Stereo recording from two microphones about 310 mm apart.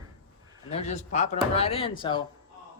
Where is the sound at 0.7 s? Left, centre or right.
Left.